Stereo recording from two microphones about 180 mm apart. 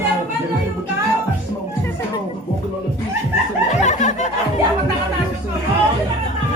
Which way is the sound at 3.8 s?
40° left (ahead or behind).